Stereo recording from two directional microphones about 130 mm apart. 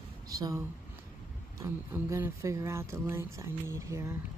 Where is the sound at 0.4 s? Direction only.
25° right (ahead or behind).